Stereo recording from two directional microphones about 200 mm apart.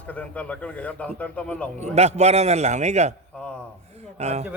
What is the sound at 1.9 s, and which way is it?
A man's voice, 35° right (ahead or behind).